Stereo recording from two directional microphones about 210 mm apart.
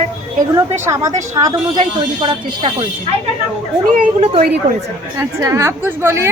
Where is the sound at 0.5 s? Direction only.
15° right (ahead or behind).